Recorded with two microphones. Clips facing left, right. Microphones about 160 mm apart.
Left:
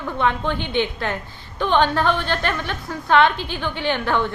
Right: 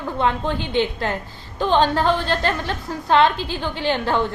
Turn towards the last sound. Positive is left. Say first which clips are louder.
# right 1 dB
turn(degrees=-35)  # may be behind; listen again after turning